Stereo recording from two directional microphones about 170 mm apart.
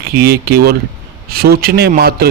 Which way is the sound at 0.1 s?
70° right (ahead or behind).